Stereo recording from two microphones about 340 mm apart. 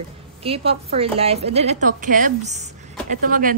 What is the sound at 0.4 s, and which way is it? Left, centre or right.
A woman's voice, centre.